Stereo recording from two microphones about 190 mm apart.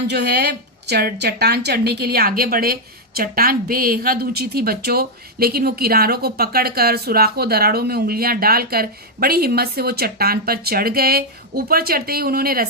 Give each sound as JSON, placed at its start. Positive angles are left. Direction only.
{"t": 0.1, "sound": "a woman's voice", "side_deg": -60}